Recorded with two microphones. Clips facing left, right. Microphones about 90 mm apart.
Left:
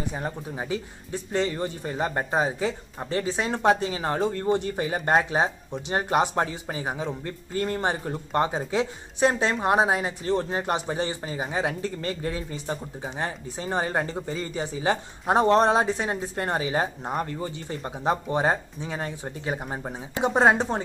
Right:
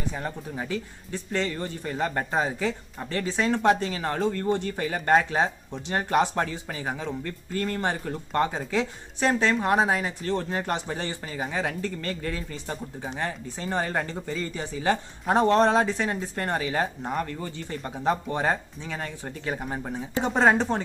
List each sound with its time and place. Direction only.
0.1 s speech: 20° left (ahead or behind)